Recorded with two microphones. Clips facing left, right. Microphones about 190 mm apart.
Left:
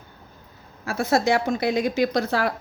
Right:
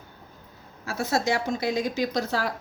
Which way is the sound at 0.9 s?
60° left (ahead or behind).